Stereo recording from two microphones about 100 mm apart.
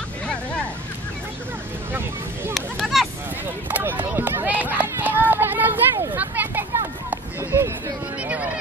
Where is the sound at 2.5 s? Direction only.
Centre (ahead or behind).